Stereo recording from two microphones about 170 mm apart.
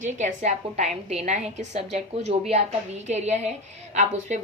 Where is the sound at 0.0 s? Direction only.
45° right (ahead or behind).